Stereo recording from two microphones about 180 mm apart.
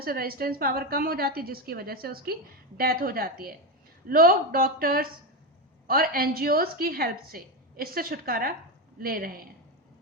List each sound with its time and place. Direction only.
0.0 s a woman's voice: 55° right (ahead or behind)